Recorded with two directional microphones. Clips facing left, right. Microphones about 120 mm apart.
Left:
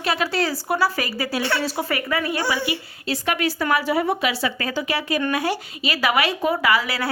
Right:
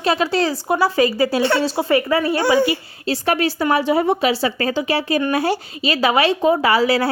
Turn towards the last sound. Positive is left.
turn(degrees=-30)  # may be behind; listen again after turning